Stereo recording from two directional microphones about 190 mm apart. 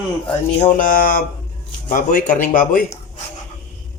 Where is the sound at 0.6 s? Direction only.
45° left (ahead or behind).